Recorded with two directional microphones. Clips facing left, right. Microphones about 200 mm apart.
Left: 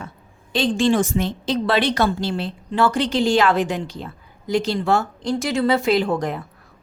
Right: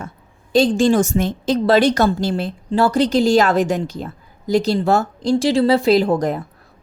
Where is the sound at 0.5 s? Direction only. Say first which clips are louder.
Right 4 dB; 40° right (ahead or behind).